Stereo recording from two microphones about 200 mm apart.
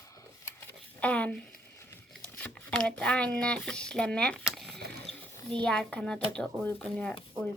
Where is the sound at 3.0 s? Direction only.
5° left (ahead or behind).